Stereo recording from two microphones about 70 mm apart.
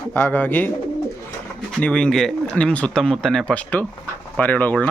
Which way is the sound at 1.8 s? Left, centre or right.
Centre.